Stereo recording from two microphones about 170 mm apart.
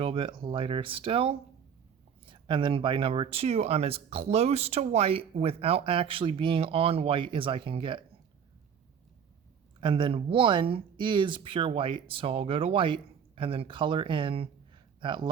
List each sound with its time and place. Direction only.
0.0 s speech: 30° right (ahead or behind)
9.8 s speech: 30° right (ahead or behind)